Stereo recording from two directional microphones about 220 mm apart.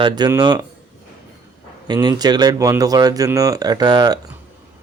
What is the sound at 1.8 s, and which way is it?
Speech, 20° right (ahead or behind).